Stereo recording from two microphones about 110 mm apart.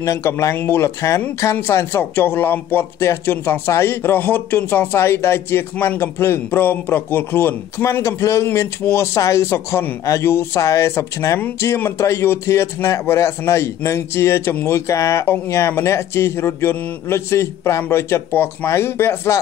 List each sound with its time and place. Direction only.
0.0 s a man's voice: 25° left (ahead or behind)